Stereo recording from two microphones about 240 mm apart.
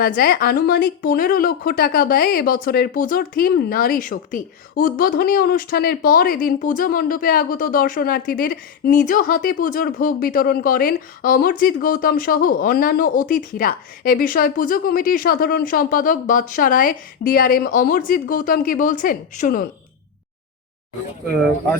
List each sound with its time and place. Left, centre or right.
0.0 s speech: left